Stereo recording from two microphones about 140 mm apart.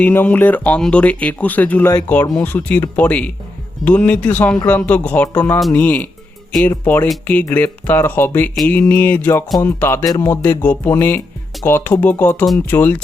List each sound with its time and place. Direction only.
0.0 s speech: 15° left (ahead or behind)
10.4 s speech: 10° left (ahead or behind)